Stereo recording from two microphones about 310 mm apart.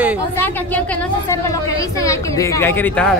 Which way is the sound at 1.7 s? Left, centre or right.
Centre.